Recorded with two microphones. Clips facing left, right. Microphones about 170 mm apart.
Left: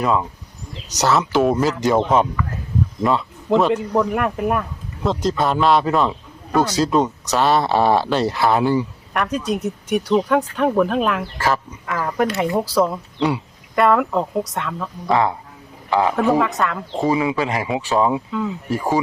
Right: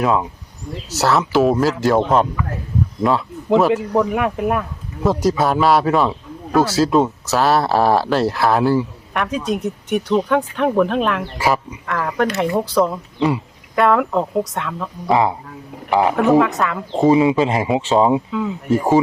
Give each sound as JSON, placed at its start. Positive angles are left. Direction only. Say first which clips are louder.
{"t": 0.0, "sound": "a man's voice", "louder": "right 2 dB", "side_deg": 0}
{"t": 3.0, "sound": "a man's voice", "louder": "right 2 dB", "side_deg": 0}
{"t": 11.3, "sound": "speech", "louder": "right 2 dB", "side_deg": -10}
{"t": 11.9, "sound": "a man's voice", "louder": "right 1 dB", "side_deg": 0}
{"t": 16.1, "sound": "a man's voice", "louder": "right 3 dB", "side_deg": 0}
{"t": 16.9, "sound": "speech", "louder": "right 8 dB", "side_deg": -20}
{"t": 18.3, "sound": "a man's voice", "louder": "right 2 dB", "side_deg": 0}
{"t": 18.7, "sound": "speech", "louder": "right 6 dB", "side_deg": -20}